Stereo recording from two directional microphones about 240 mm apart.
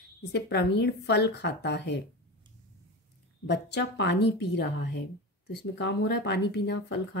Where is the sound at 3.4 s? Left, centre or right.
Left.